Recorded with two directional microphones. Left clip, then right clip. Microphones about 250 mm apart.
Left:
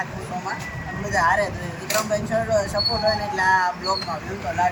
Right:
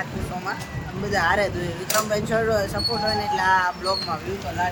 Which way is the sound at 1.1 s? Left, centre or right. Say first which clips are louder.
Left 1 dB; centre.